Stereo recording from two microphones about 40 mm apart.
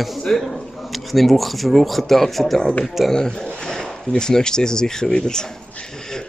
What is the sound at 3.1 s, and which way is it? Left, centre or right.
Speech, centre.